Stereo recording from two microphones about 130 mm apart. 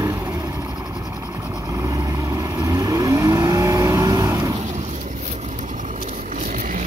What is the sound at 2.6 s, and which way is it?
Vehicle, 25° right (ahead or behind).